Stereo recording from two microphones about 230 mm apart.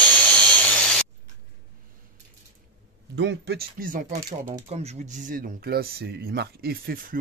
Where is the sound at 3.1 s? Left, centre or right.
Right.